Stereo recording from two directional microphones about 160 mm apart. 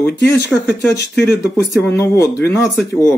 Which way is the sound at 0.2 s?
15° left (ahead or behind).